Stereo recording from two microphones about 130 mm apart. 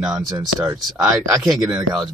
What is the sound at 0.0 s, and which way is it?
Speech, 5° right (ahead or behind).